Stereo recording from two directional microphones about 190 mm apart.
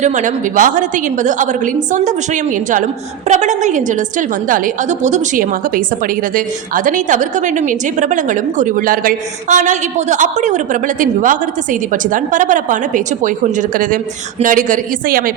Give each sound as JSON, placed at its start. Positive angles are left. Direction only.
{"t": 0.0, "sound": "a woman's voice", "side_deg": -40}